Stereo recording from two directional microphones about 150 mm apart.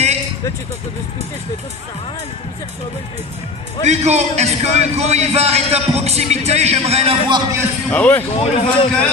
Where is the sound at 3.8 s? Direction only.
50° right (ahead or behind).